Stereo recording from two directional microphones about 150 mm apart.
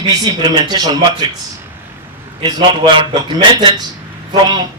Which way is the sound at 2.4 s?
30° right (ahead or behind).